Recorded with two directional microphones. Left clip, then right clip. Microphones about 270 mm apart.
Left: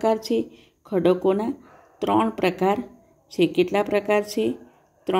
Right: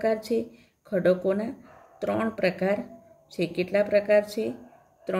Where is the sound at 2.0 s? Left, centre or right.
Left.